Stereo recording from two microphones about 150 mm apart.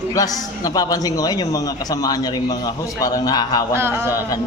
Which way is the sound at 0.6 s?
25° left (ahead or behind).